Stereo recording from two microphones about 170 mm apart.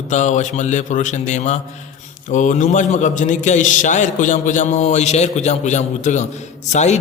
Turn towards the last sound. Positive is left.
turn(degrees=45)  # may be behind; listen again after turning